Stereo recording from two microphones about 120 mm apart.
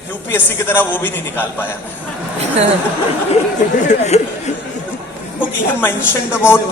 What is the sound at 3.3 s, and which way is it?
Speech, 85° left.